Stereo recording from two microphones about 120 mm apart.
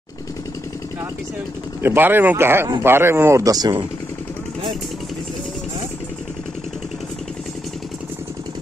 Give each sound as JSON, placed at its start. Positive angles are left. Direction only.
{"t": 1.8, "sound": "speech", "side_deg": -20}